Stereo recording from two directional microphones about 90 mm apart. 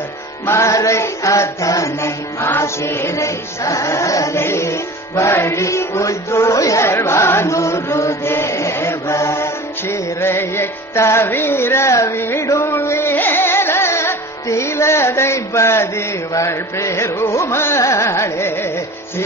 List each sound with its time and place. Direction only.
0.5 s chant: 35° left (ahead or behind)
16.3 s music: 35° left (ahead or behind)